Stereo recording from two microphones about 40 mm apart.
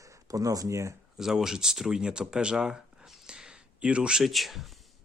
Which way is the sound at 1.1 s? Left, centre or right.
Centre.